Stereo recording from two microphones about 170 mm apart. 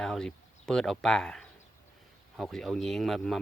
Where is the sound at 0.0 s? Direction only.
5° left (ahead or behind).